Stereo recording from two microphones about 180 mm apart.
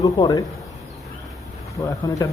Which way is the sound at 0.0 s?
20° left (ahead or behind).